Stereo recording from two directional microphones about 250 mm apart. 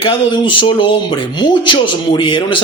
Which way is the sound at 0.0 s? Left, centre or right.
Centre.